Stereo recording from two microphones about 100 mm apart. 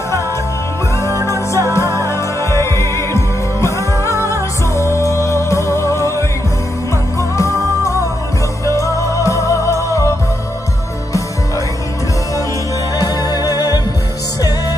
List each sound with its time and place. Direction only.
1.5 s music: 30° left (ahead or behind)
8.6 s music: 30° left (ahead or behind)
12.9 s music: 40° left (ahead or behind)